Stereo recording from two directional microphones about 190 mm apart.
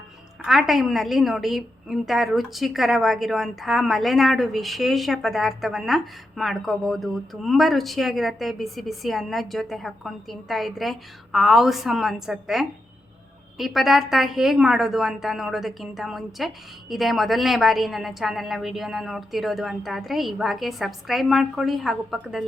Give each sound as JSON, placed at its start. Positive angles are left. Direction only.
{"t": 0.4, "sound": "a woman's voice", "side_deg": 0}